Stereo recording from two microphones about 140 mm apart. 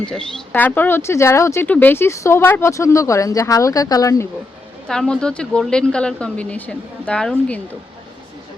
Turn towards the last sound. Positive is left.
turn(degrees=5)  # may be behind; listen again after turning